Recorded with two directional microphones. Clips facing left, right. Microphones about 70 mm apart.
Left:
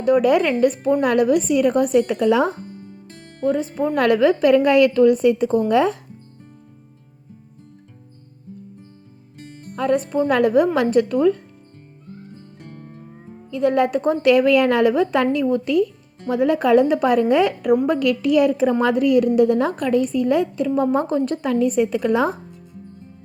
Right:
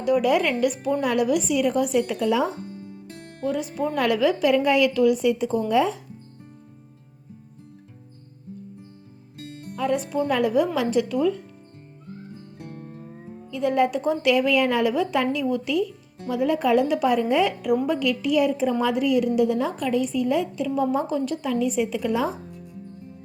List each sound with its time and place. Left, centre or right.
0.0 s a woman's voice: left
3.4 s speech: left
3.9 s a woman's voice: left
9.7 s a woman's voice: left
13.5 s a woman's voice: left